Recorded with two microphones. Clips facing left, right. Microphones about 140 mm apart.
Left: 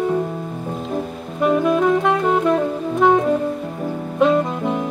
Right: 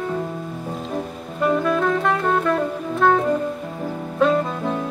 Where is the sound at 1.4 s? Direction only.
15° left (ahead or behind).